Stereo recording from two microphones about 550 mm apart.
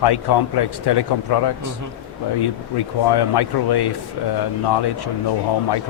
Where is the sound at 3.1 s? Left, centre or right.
Left.